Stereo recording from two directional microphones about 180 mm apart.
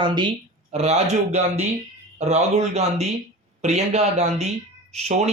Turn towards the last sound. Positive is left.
turn(degrees=-35)  # may be behind; listen again after turning